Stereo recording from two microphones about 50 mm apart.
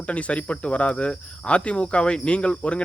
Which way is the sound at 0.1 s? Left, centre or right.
Left.